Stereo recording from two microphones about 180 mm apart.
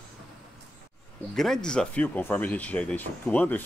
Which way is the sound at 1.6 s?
5° left (ahead or behind).